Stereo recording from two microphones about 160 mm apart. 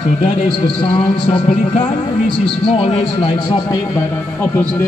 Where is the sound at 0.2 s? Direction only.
35° left (ahead or behind).